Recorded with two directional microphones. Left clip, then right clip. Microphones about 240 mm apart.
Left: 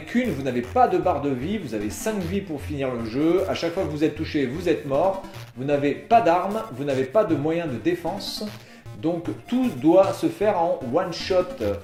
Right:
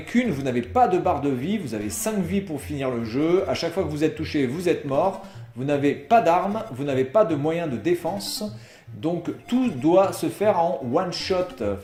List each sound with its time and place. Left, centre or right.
0.1 s speech: right
9.5 s speech: right